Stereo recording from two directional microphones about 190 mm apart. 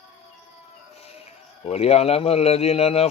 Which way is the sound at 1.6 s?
35° left (ahead or behind).